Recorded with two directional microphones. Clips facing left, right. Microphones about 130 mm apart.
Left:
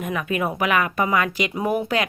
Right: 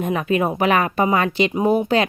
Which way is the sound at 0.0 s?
30° right (ahead or behind).